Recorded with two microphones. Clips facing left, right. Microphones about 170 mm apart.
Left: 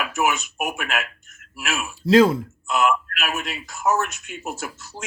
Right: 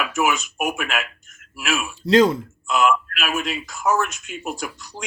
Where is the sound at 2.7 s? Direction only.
20° left (ahead or behind).